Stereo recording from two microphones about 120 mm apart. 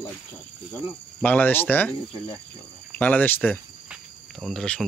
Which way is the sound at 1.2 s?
15° left (ahead or behind).